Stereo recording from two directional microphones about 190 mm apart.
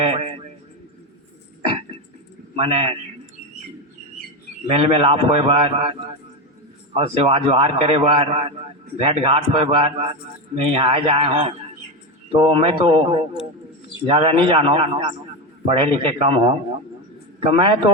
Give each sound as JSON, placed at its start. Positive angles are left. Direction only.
{"t": 0.0, "sound": "a man's voice", "side_deg": -30}
{"t": 2.6, "sound": "a man's voice", "side_deg": -30}
{"t": 4.7, "sound": "a man's voice", "side_deg": -30}
{"t": 14.1, "sound": "a man's voice", "side_deg": -30}